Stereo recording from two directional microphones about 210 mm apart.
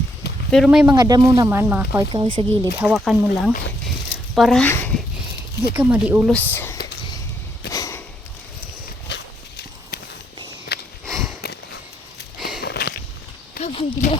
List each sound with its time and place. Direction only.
0.5 s speech: centre (ahead or behind)
0.9 s speech: 20° right (ahead or behind)
2.7 s speech: 5° right (ahead or behind); by 5.0 s 10° left (ahead or behind)
5.7 s speech: 10° right (ahead or behind)
6.3 s speech: 10° left (ahead or behind)
7.7 s sniff: 15° left (ahead or behind)
9.0 s walk: 50° left (ahead or behind)
11.0 s sniff: centre (ahead or behind)
12.4 s sniff: centre (ahead or behind)
12.6 s walk: 50° left (ahead or behind)
13.6 s a sound: 30° left (ahead or behind)